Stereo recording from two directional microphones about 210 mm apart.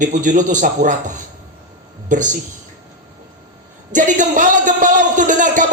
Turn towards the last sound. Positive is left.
turn(degrees=-35)  # may be behind; listen again after turning